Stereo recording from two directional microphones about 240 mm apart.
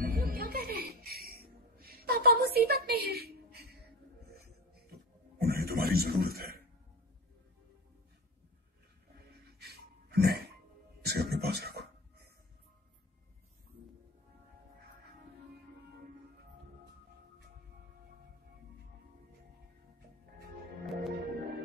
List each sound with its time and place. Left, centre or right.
0.0 s music: right
4.9 s a sound: right
10.1 s music: right
20.8 s music: centre